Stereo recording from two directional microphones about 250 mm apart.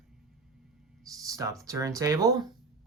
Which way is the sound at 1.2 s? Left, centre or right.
Centre.